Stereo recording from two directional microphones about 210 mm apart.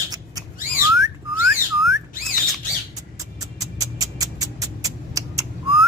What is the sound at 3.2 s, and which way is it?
Music, 15° right (ahead or behind).